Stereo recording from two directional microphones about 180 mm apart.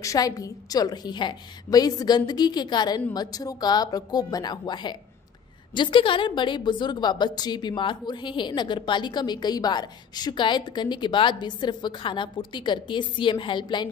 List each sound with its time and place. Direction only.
0.0 s a woman's voice: 20° left (ahead or behind)